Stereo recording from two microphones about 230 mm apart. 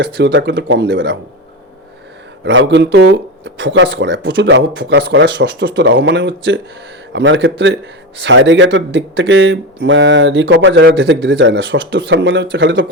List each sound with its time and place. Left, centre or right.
0.0 s speech: right
2.4 s speech: right